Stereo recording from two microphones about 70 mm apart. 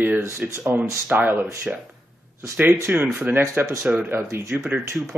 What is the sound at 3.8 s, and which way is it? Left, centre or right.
Speech, centre.